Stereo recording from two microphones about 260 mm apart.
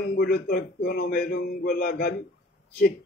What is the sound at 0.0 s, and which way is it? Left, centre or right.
A man's voice, left.